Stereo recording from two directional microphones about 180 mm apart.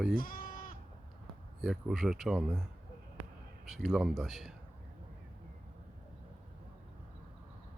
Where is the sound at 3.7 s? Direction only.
Centre (ahead or behind).